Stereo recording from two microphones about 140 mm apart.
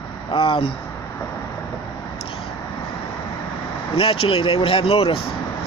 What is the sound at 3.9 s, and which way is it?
Speech, 40° left (ahead or behind).